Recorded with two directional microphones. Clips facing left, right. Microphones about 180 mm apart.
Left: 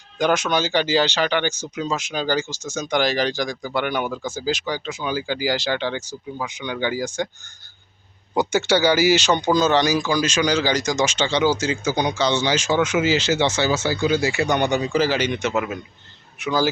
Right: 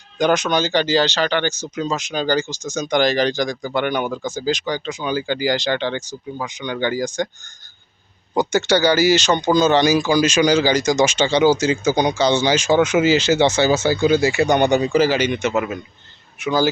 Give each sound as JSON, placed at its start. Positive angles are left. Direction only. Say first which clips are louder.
{"t": 0.2, "sound": "speech", "louder": "right 2 dB", "side_deg": 5}
{"t": 8.4, "sound": "speech", "louder": "right 2 dB", "side_deg": 10}
{"t": 13.4, "sound": "speech", "louder": "right 5 dB", "side_deg": -45}
{"t": 14.9, "sound": "speech", "louder": "right 4 dB", "side_deg": -5}